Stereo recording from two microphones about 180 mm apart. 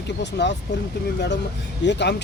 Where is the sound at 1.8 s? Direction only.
70° left (ahead or behind).